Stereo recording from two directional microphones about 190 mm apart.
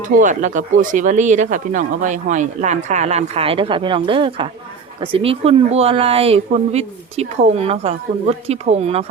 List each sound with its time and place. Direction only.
0.2 s speech: 40° right (ahead or behind)